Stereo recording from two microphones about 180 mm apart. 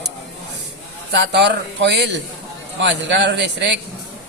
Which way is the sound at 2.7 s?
85° right.